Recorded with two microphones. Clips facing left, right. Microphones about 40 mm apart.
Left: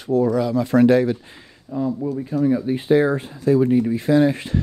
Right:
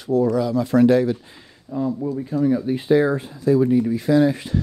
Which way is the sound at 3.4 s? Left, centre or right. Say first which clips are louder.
Even; left.